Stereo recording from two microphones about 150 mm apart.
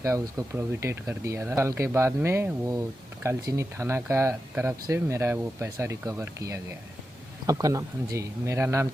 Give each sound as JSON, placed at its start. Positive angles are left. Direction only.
{"t": 0.0, "sound": "speech", "side_deg": -20}